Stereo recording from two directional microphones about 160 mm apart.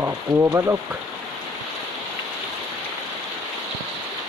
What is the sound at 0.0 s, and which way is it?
Speech, 20° right (ahead or behind).